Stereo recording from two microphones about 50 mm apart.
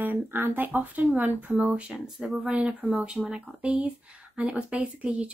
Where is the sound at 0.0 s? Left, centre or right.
Right.